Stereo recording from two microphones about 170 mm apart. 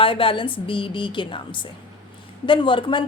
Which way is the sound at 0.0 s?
30° left (ahead or behind).